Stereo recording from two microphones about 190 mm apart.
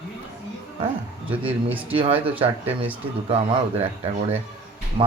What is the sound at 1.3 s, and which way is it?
Speech, 10° right (ahead or behind).